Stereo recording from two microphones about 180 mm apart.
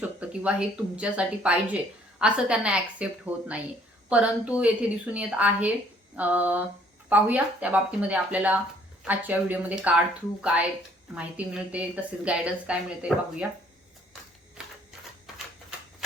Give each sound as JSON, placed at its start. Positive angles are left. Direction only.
{"t": 0.0, "sound": "a woman's voice", "side_deg": -5}
{"t": 11.1, "sound": "speech", "side_deg": -5}
{"t": 14.6, "sound": "a sound", "side_deg": -5}